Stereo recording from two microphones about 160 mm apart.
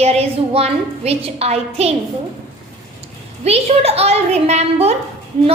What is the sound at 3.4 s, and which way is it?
A woman's voice, 40° right (ahead or behind).